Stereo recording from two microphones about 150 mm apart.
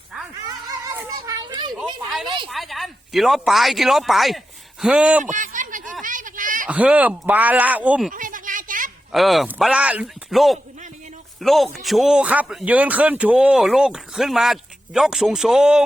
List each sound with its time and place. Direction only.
1.2 s children playing: 30° right (ahead or behind)
2.5 s speech: centre (ahead or behind)
5.2 s a sound: 60° right (ahead or behind)
6.7 s speech: 10° right (ahead or behind)
8.1 s a sound: 60° right (ahead or behind)
9.1 s speech: centre (ahead or behind)